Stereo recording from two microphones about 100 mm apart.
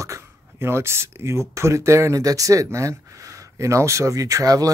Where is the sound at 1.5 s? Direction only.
30° right (ahead or behind).